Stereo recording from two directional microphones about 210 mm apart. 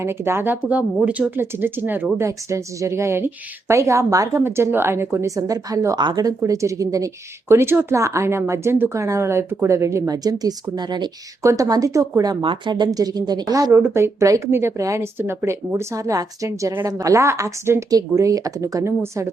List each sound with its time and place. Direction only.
0.0 s speech: 10° right (ahead or behind)